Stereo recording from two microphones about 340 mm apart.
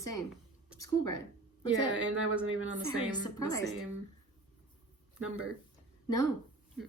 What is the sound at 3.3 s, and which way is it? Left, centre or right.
Speech, centre.